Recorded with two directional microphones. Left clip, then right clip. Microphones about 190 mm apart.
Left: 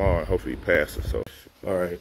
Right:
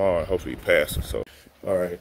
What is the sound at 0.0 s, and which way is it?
Speech, centre (ahead or behind).